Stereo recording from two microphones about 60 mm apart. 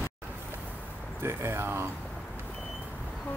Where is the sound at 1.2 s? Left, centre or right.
Right.